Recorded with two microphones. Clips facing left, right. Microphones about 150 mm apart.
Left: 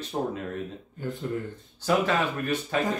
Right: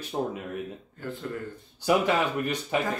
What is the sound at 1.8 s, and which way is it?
Speech, 15° right (ahead or behind).